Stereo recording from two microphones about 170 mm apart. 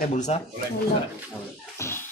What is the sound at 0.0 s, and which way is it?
Speech, 45° left (ahead or behind).